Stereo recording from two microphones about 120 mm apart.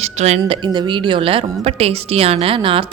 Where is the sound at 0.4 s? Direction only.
40° right (ahead or behind).